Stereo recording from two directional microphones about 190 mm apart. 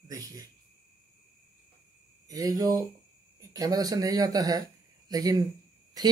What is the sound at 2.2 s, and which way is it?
Speech, 20° right (ahead or behind).